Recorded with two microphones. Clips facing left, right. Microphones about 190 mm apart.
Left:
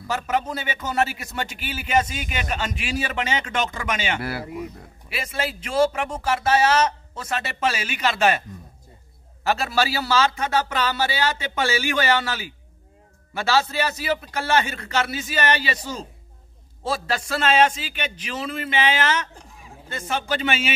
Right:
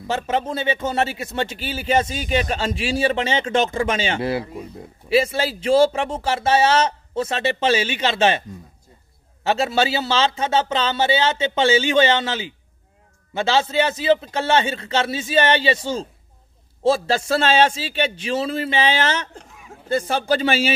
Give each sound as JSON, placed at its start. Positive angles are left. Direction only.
{"t": 0.0, "sound": "a man's voice", "side_deg": -25}